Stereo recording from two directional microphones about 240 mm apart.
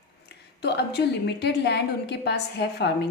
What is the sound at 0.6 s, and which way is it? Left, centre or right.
A woman's voice, left.